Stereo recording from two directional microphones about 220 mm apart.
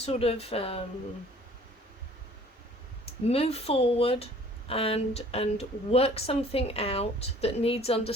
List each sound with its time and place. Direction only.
0.0 s a woman's voice: 25° left (ahead or behind)
3.2 s a woman's voice: 25° left (ahead or behind)